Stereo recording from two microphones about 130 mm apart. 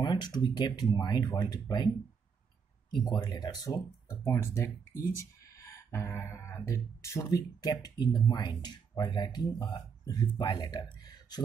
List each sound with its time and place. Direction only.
0.0 s speech: 35° left (ahead or behind)
3.1 s speech: 35° left (ahead or behind)